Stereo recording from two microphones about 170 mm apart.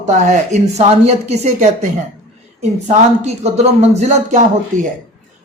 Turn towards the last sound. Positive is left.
turn(degrees=-45)  # may be behind; listen again after turning